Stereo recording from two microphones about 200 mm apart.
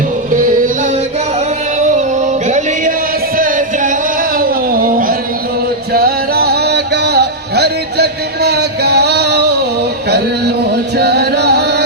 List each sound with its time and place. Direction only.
2.0 s music: 35° right (ahead or behind)
3.3 s a sound: 45° right (ahead or behind)
5.9 s music: 50° right (ahead or behind)
10.9 s music: 55° right (ahead or behind)